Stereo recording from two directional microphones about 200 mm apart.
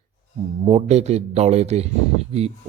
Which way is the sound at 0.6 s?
30° right (ahead or behind).